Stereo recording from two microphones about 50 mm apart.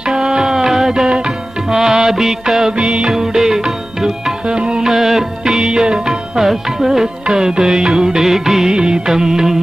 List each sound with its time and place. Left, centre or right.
0.1 s music: centre
2.8 s music: centre
3.1 s music: centre